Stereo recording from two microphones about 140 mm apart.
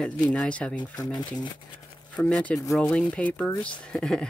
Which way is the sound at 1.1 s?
30° left (ahead or behind).